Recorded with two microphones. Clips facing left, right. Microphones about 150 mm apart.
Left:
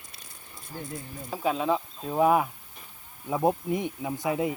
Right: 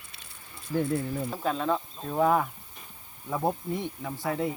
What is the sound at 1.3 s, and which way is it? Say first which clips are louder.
Speech: left 4 dB; 5° left (ahead or behind).